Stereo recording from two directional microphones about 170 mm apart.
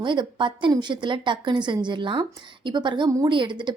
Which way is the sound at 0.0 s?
30° right (ahead or behind).